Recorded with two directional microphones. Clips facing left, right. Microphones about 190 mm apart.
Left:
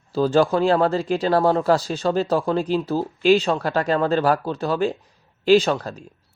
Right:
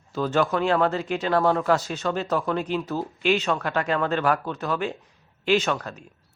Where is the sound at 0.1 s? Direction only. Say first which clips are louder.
Left 5 dB; 30° left (ahead or behind).